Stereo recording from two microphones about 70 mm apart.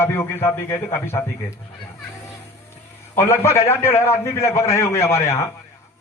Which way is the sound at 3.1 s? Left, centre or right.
Left.